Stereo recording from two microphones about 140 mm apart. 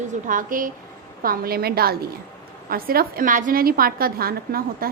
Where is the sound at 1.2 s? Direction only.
90° right.